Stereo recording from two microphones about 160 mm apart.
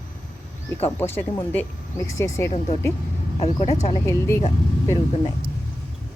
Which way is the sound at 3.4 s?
40° left (ahead or behind).